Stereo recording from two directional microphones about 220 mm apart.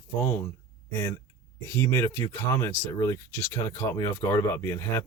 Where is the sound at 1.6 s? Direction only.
10° left (ahead or behind).